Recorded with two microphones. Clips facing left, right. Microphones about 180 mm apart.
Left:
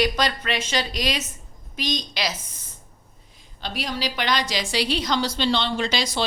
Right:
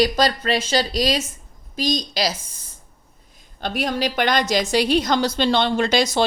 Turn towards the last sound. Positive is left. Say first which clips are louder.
# right 6 dB
turn(degrees=-50)  # may be behind; listen again after turning